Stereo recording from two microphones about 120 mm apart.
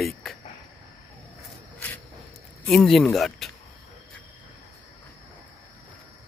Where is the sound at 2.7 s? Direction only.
Centre (ahead or behind).